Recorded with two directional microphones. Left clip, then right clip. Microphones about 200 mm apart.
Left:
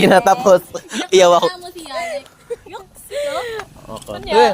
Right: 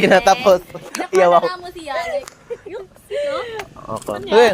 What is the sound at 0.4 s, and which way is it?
Speech, 65° left (ahead or behind).